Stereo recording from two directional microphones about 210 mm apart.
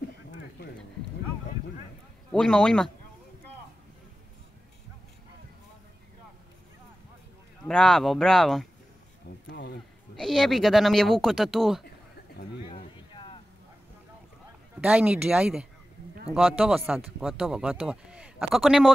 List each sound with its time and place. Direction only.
2.3 s speech: 5° left (ahead or behind)
7.6 s speech: 5° left (ahead or behind)
9.5 s a sound: 55° left (ahead or behind)
10.1 s speech: centre (ahead or behind)
12.6 s a sound: 25° left (ahead or behind)
14.8 s speech: 5° right (ahead or behind)